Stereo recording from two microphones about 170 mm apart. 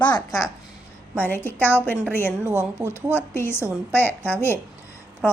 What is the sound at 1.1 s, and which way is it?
A woman's voice, 10° left (ahead or behind).